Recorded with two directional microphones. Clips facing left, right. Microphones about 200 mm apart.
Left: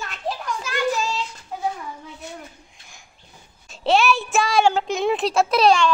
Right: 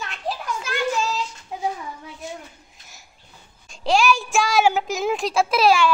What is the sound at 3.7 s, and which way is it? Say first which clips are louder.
Child singing: left 1 dB; 5° left (ahead or behind).